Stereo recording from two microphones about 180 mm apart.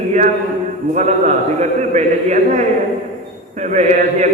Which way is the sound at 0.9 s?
40° right (ahead or behind).